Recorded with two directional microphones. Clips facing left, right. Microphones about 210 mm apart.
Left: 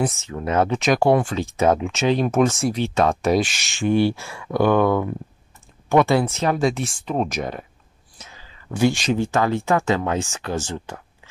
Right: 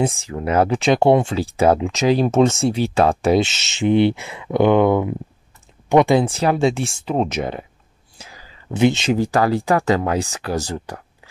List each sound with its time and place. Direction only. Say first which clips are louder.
0.0 s speech: right 3 dB; 30° right (ahead or behind)
6.2 s speech: right 3 dB; 30° right (ahead or behind)
8.2 s whispering: right 3 dB; 35° right (ahead or behind)
8.7 s speech: right 3 dB; 20° right (ahead or behind)
9.2 s speech: right 3 dB; 35° right (ahead or behind)